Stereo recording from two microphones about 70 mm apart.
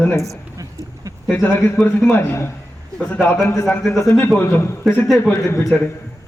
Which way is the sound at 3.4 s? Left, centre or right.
Left.